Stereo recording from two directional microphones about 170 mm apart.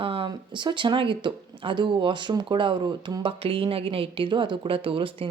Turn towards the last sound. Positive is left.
turn(degrees=-30)  # may be behind; listen again after turning